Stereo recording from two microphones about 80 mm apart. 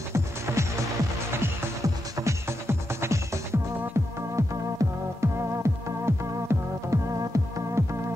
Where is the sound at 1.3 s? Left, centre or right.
Right.